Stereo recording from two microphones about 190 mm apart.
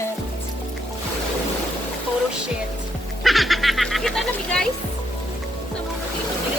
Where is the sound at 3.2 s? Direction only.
Centre (ahead or behind).